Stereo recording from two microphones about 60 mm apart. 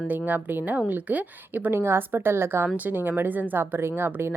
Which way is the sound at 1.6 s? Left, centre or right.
Right.